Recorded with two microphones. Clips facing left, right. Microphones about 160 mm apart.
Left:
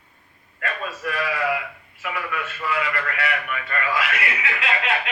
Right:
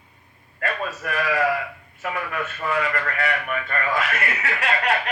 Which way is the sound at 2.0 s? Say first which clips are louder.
Right 1 dB; 40° right (ahead or behind).